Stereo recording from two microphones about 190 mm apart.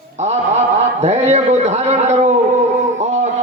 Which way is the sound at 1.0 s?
35° right (ahead or behind).